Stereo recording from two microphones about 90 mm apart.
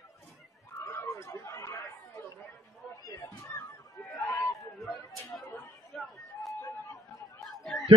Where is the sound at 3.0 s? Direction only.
35° left (ahead or behind).